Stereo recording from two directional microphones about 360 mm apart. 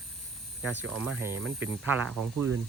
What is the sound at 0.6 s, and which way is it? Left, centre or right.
Speech, centre.